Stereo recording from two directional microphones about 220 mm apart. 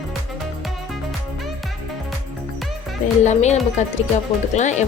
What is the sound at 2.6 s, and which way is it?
Music, centre (ahead or behind).